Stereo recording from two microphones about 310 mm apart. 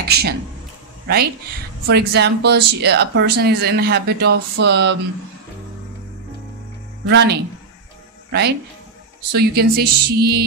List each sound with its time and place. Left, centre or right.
0.1 s speech: right
7.1 s speech: right